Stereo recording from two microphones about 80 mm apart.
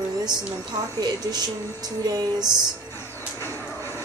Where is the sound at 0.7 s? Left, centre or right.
Right.